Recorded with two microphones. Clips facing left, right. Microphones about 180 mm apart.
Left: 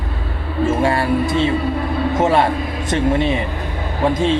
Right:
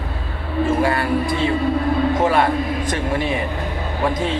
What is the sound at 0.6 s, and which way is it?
Speech, 25° left (ahead or behind).